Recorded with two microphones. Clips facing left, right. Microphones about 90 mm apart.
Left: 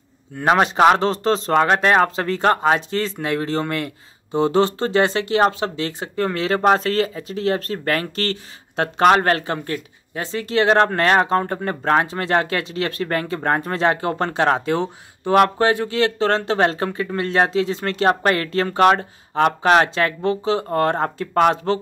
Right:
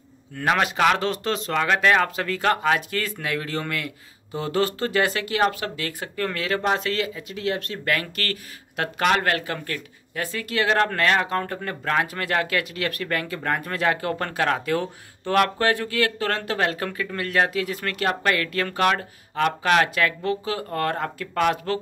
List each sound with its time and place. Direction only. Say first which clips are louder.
0.4 s speech: left 6 dB; 30° left (ahead or behind)
6.6 s speech: left 9 dB; 40° left (ahead or behind)